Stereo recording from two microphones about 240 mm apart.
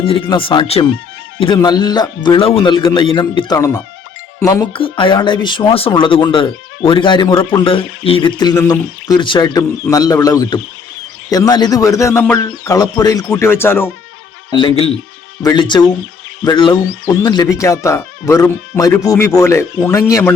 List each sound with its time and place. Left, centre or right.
0.0 s a man's voice: left
14.5 s a man's voice: left